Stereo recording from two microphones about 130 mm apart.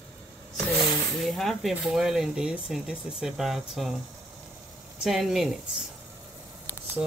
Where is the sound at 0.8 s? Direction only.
Centre (ahead or behind).